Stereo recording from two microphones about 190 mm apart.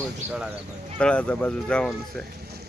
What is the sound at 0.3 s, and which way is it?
Speech, 5° right (ahead or behind).